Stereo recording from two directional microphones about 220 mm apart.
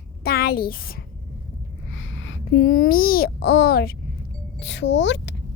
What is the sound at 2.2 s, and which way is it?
A child's voice, 50° left (ahead or behind).